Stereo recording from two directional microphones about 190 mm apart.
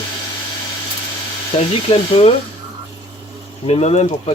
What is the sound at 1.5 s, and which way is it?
Speech, 30° left (ahead or behind).